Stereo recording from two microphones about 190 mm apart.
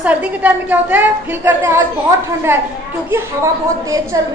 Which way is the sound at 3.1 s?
15° right (ahead or behind).